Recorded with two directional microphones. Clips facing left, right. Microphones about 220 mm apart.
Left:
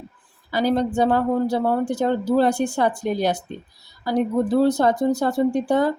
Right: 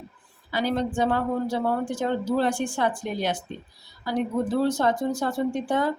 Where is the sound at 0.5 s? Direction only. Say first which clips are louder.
Left 5 dB; 40° left (ahead or behind).